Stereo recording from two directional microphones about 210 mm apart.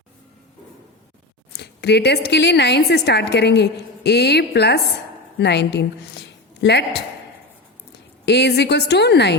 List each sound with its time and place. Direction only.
1.5 s a woman's voice: 50° left (ahead or behind)
8.2 s a woman's voice: 55° left (ahead or behind)